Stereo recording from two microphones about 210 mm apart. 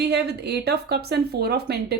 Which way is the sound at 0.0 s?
50° right (ahead or behind).